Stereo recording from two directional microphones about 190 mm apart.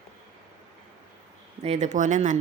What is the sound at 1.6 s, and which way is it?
Speech, 40° right (ahead or behind).